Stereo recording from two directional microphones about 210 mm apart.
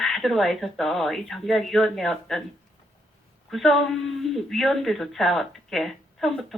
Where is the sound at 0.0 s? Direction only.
Centre (ahead or behind).